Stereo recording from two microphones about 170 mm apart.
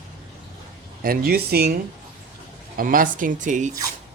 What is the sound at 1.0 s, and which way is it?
Speech, 65° right (ahead or behind).